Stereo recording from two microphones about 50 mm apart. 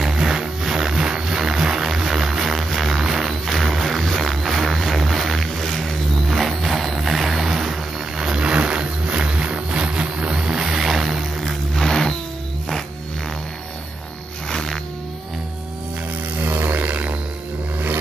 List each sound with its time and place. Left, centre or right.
0.0 s a sound: centre
11.7 s music: centre
14.5 s music: centre
16.3 s music: right